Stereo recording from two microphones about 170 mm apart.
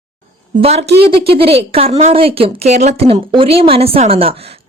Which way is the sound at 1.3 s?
35° right (ahead or behind).